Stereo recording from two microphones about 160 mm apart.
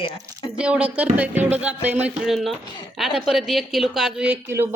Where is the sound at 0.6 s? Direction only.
5° right (ahead or behind).